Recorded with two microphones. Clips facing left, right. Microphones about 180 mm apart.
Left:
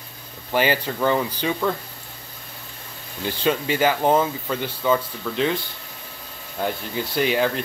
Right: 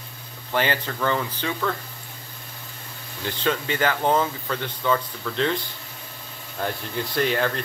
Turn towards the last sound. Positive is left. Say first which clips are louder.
# left 2 dB
turn(degrees=5)  # may be behind; listen again after turning